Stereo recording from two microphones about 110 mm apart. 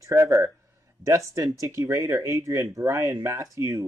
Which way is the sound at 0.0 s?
25° right (ahead or behind).